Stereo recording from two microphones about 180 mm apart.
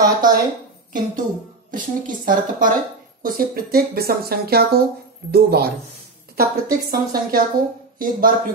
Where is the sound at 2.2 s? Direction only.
50° right (ahead or behind).